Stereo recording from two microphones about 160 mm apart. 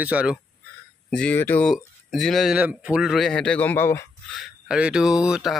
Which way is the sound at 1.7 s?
Centre (ahead or behind).